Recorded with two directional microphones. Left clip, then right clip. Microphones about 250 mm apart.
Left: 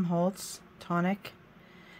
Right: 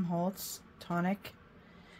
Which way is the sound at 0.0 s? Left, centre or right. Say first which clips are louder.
Left 5 dB; left.